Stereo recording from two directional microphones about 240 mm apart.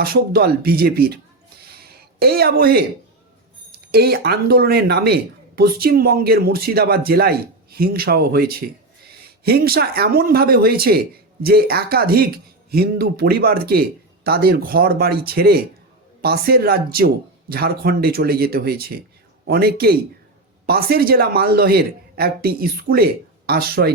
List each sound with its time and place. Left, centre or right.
0.0 s speech: right
1.7 s a sound: right
3.7 s speech: right